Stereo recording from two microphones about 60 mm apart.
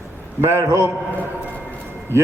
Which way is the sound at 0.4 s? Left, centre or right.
Right.